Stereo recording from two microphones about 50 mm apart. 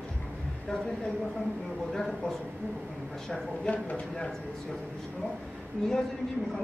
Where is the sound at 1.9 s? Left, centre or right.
Centre.